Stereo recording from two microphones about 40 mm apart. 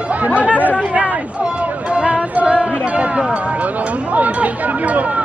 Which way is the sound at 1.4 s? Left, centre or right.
Right.